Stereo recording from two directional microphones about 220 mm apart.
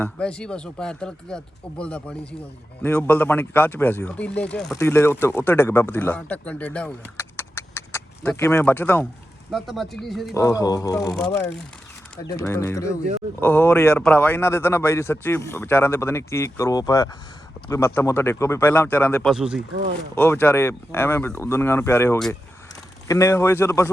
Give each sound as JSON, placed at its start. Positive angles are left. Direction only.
{"t": 0.0, "sound": "speech", "side_deg": 5}
{"t": 10.3, "sound": "speech", "side_deg": 15}
{"t": 11.1, "sound": "speech", "side_deg": 0}
{"t": 12.3, "sound": "speech", "side_deg": 15}
{"t": 19.3, "sound": "speech", "side_deg": -5}
{"t": 20.1, "sound": "speech", "side_deg": 10}